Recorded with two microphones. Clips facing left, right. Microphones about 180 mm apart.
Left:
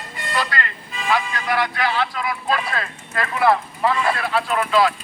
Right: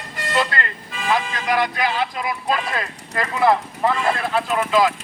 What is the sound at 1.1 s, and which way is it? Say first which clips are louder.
Speech: right 1 dB; 20° right (ahead or behind).